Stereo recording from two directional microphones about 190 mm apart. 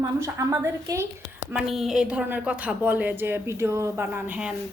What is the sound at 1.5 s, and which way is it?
A woman's voice, centre (ahead or behind).